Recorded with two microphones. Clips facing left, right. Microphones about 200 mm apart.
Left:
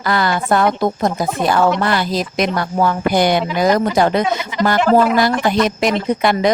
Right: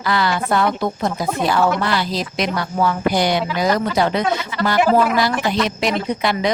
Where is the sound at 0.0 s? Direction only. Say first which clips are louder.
Left 2 dB; 50° left (ahead or behind).